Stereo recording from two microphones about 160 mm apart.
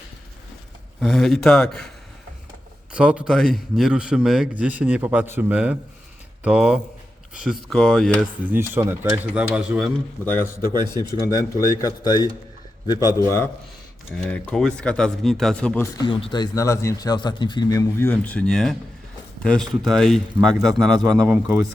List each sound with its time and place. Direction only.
1.0 s speech: centre (ahead or behind)
2.9 s a man's voice: 5° right (ahead or behind)
8.4 s a man's voice: 15° right (ahead or behind)
10.2 s a man's voice: 15° left (ahead or behind)
14.3 s speech: 5° left (ahead or behind)
15.8 s a man's voice: 25° left (ahead or behind)
18.1 s speech: 10° left (ahead or behind)